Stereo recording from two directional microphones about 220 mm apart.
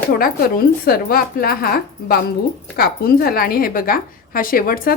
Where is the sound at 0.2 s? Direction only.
40° left (ahead or behind).